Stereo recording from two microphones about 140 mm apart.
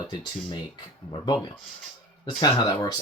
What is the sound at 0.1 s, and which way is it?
Speech, 35° left (ahead or behind).